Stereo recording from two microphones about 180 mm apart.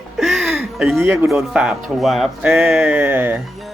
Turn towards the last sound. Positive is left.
turn(degrees=-10)  # may be behind; listen again after turning